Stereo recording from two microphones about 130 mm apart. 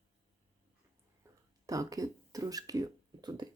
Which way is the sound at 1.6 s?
25° right (ahead or behind).